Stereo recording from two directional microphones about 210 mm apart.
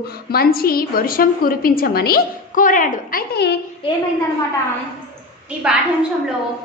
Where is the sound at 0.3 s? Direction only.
45° left (ahead or behind).